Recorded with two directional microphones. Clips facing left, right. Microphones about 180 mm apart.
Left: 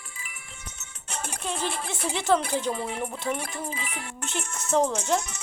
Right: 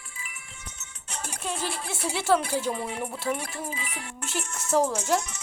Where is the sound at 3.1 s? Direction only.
5° right (ahead or behind).